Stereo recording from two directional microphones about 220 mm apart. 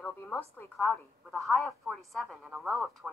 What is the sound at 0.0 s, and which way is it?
A woman's voice, 10° left (ahead or behind).